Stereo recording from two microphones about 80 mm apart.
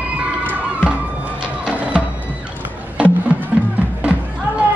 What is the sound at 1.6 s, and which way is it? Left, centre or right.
Music, centre.